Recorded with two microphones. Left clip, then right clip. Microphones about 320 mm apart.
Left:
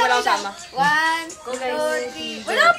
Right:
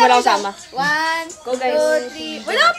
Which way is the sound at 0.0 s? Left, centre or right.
Right.